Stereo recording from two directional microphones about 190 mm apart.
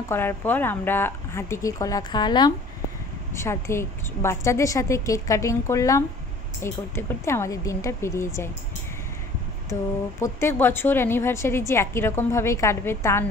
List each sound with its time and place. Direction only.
0.1 s a woman's voice: 10° left (ahead or behind)
10.2 s a woman's voice: 10° left (ahead or behind)